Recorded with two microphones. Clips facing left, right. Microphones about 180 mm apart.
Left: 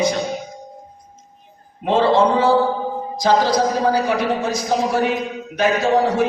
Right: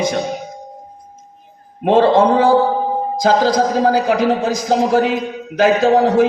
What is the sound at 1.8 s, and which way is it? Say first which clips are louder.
Speech: right 4 dB; 55° right (ahead or behind).